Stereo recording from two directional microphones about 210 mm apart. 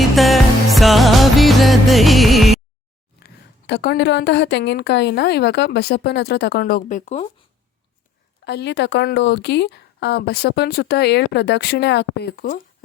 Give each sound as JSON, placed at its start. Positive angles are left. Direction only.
{"t": 0.2, "sound": "music", "side_deg": 0}
{"t": 3.2, "sound": "a woman's voice", "side_deg": 50}
{"t": 8.4, "sound": "a woman's voice", "side_deg": 55}